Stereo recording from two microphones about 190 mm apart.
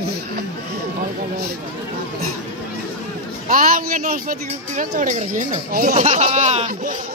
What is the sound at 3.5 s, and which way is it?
Speech, 45° right (ahead or behind).